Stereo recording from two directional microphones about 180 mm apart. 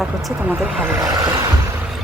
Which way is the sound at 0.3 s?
10° right (ahead or behind).